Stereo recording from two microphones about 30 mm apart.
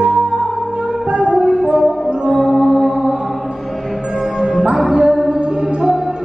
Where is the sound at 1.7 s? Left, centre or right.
Right.